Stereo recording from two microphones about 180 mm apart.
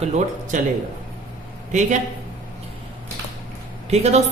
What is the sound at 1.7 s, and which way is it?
Speech, 45° right (ahead or behind).